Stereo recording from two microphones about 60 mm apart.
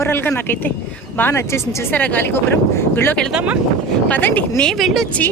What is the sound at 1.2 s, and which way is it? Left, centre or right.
Speech, left.